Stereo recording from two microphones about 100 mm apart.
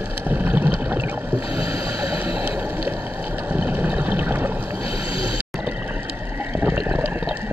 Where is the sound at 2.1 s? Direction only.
15° right (ahead or behind).